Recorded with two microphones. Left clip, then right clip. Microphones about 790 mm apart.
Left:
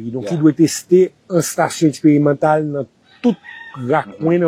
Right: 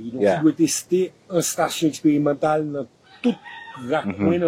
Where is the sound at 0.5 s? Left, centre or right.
Left.